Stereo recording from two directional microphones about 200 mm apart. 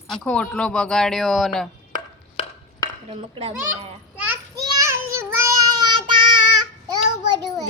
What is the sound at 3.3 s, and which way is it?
Speech, 30° right (ahead or behind).